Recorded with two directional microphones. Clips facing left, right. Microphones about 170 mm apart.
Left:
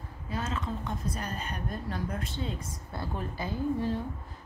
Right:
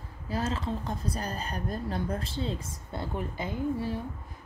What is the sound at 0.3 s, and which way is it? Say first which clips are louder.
A woman's voice: right 3 dB; 30° right (ahead or behind).